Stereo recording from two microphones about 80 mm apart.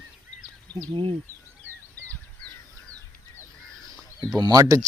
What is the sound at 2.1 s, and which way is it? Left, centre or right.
Crow, centre.